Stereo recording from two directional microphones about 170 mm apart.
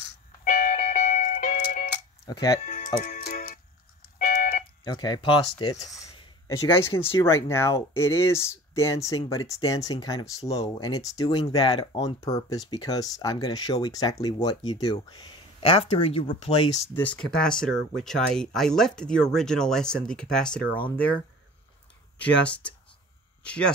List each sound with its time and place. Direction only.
0.4 s music: 50° left (ahead or behind)
2.2 s speech: 20° left (ahead or behind)
2.6 s music: 50° left (ahead or behind)
4.2 s fire alarm: 50° left (ahead or behind)
4.8 s speech: 25° left (ahead or behind)
16.9 s speech: 10° left (ahead or behind)
22.2 s speech: 5° left (ahead or behind)